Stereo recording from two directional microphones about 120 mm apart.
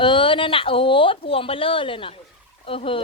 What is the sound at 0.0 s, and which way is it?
Speech, 45° left (ahead or behind).